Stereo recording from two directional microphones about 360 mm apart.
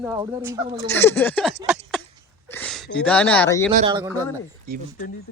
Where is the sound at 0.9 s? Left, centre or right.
Centre.